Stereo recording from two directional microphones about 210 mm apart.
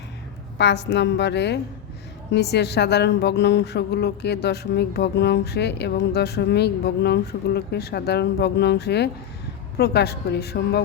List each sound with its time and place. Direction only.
0.6 s a woman's voice: 55° left (ahead or behind)